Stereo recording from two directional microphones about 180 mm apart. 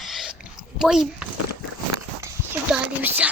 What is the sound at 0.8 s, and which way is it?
Speech, 5° right (ahead or behind).